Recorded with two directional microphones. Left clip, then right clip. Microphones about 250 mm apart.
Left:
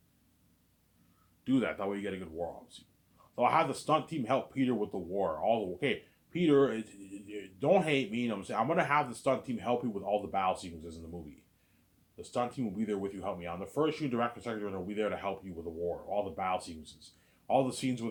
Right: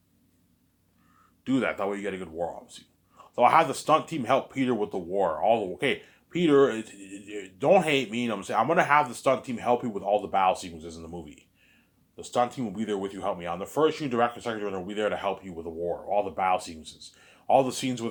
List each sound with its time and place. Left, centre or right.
1.5 s speech: centre